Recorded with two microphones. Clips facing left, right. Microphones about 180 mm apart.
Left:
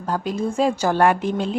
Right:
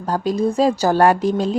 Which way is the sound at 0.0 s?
35° right (ahead or behind).